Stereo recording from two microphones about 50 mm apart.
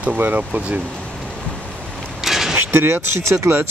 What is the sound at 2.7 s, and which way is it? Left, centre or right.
Speech, right.